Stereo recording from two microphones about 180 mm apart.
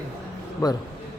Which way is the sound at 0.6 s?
20° left (ahead or behind).